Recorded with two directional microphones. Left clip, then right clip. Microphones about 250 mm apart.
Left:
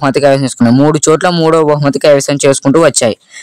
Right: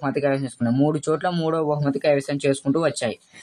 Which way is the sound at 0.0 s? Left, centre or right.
Left.